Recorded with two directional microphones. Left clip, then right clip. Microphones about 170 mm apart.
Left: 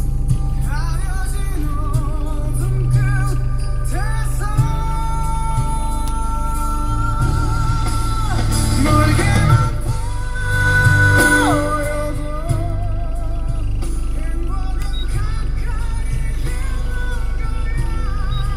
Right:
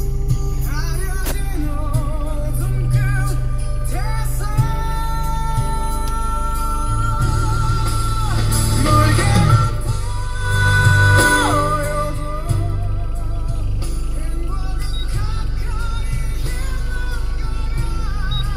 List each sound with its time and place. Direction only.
7.2 s music: 45° right (ahead or behind)